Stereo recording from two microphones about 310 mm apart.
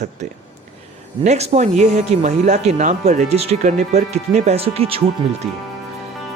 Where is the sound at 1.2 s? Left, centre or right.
Right.